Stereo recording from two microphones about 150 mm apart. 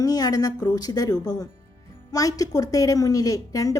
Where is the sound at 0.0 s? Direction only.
25° left (ahead or behind).